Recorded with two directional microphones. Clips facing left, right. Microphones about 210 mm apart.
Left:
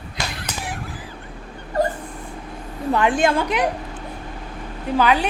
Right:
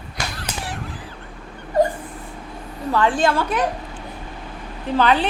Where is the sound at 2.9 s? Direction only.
15° left (ahead or behind).